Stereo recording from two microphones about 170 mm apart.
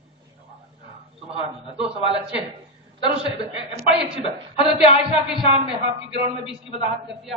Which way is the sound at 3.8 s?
35° left (ahead or behind).